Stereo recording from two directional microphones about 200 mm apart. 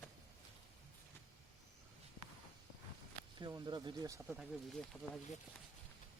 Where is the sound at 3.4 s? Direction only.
20° right (ahead or behind).